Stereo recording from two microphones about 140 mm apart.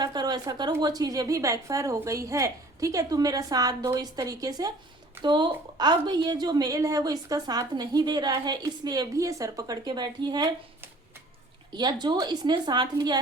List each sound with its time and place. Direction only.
0.0 s a woman's voice: 30° right (ahead or behind)
11.7 s a woman's voice: 30° right (ahead or behind)